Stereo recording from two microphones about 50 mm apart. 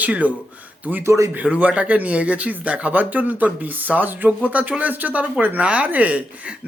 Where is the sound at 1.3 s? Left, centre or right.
Right.